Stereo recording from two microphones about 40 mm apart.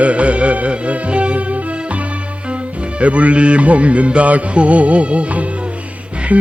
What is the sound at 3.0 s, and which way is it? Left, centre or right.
Music, right.